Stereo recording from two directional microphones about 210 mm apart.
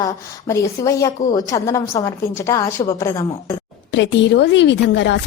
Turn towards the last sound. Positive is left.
turn(degrees=55)  # may be behind; listen again after turning